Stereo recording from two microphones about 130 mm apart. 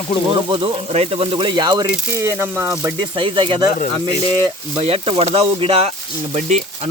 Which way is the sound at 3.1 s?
40° right (ahead or behind).